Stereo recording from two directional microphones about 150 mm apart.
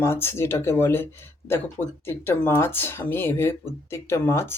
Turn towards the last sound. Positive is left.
turn(degrees=15)  # may be behind; listen again after turning